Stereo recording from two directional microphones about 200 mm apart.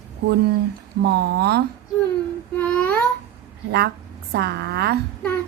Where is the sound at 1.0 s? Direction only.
55° right (ahead or behind).